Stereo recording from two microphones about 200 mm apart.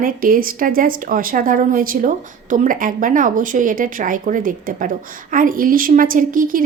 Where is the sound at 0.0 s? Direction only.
45° right (ahead or behind).